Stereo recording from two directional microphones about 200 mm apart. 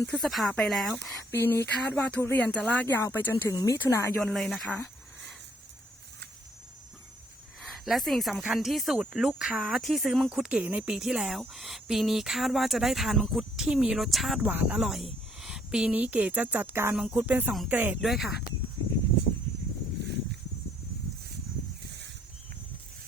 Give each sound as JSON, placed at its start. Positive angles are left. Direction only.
{"t": 0.0, "sound": "speech", "side_deg": 5}
{"t": 1.3, "sound": "speech", "side_deg": 15}
{"t": 4.2, "sound": "speech", "side_deg": 0}
{"t": 7.6, "sound": "speech", "side_deg": 0}
{"t": 21.8, "sound": "a sound", "side_deg": -60}